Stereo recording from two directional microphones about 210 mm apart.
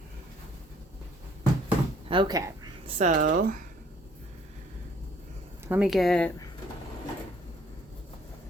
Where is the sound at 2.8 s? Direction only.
35° right (ahead or behind).